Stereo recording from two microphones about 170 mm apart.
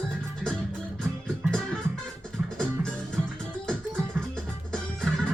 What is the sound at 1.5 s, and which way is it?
Music, 5° left (ahead or behind).